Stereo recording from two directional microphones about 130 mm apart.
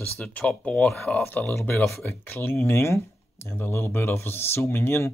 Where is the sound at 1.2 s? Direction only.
15° left (ahead or behind).